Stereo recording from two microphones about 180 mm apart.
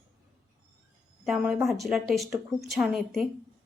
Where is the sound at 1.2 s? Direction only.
5° right (ahead or behind).